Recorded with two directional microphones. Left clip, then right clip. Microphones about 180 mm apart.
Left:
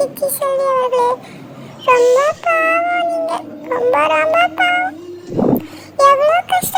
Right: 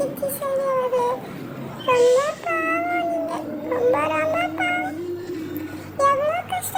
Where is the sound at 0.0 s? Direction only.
40° left (ahead or behind).